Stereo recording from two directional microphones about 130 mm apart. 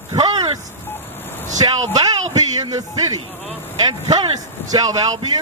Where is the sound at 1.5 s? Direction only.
30° right (ahead or behind).